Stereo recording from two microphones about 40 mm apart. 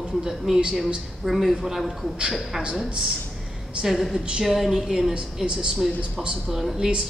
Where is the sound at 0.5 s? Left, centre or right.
Centre.